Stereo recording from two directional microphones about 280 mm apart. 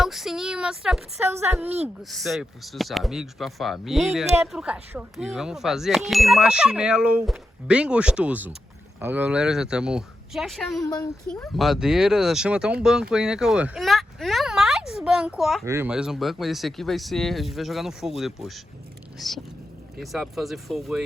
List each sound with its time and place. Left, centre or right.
0.0 s speech: centre
10.8 s speech: centre
11.3 s speech: centre
20.0 s speech: centre